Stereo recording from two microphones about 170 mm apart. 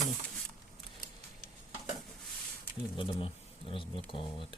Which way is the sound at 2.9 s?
30° left (ahead or behind).